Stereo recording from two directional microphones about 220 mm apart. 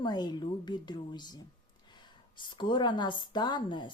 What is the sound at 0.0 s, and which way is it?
A woman's voice, 20° left (ahead or behind).